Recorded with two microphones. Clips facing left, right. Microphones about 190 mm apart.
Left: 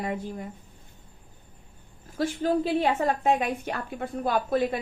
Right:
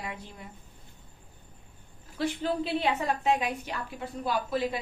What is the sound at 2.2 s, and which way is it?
A woman's voice, 45° left (ahead or behind).